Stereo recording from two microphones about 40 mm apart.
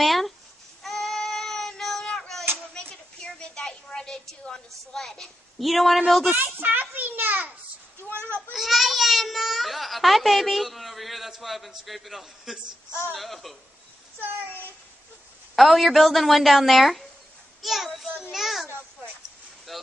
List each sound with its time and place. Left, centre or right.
0.0 s babbling: centre
0.8 s child singing: centre
2.9 s a sound: left
4.3 s a woman's voice: centre
6.3 s children playing: right
8.1 s a sound: right
8.5 s a sound: centre
13.1 s a woman's voice: centre
15.5 s a woman's voice: centre
17.6 s child singing: centre
18.3 s a sound: centre
19.7 s vehicle: centre